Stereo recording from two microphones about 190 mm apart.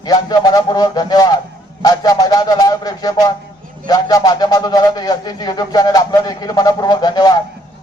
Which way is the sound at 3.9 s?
20° left (ahead or behind).